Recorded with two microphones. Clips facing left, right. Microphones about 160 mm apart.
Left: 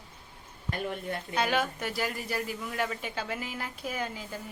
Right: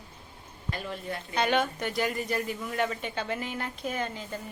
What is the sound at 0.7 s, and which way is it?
Speech, 55° left (ahead or behind).